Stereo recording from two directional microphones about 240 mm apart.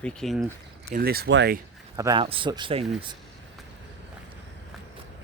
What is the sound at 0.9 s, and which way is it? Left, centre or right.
Speech, right.